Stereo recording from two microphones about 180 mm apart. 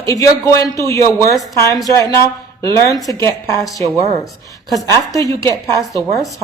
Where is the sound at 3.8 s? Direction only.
35° right (ahead or behind).